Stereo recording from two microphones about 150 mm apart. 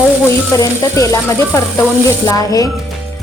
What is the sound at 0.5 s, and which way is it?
Speech, 20° left (ahead or behind).